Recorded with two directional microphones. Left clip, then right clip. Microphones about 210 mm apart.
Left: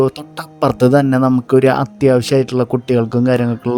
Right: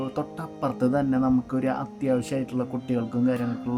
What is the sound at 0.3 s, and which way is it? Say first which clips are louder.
Speech: left 13 dB; 45° left (ahead or behind).